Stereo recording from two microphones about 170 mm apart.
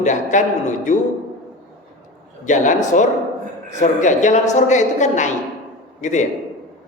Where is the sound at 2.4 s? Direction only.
45° left (ahead or behind).